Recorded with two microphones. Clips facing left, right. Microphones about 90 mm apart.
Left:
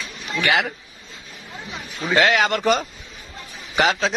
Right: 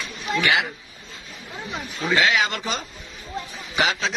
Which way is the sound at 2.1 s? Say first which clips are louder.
Left 3 dB; 50° left (ahead or behind).